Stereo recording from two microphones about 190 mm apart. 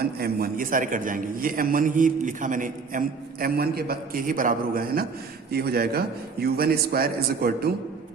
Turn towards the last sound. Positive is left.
turn(degrees=-55)  # may be behind; listen again after turning